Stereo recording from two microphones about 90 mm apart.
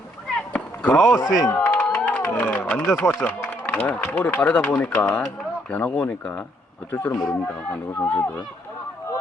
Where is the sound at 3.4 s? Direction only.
15° left (ahead or behind).